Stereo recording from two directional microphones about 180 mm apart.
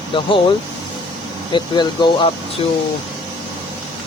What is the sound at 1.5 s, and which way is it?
Speech, 25° left (ahead or behind).